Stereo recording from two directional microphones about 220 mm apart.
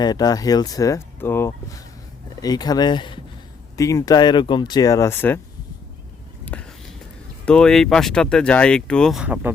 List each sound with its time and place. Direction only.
0.0 s speech: 20° left (ahead or behind)
6.4 s a sound: 5° left (ahead or behind)
7.4 s speech: 5° left (ahead or behind)